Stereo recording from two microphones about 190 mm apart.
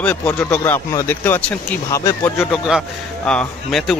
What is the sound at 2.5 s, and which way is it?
Speech, centre (ahead or behind).